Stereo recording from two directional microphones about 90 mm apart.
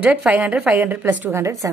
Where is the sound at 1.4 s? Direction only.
35° right (ahead or behind).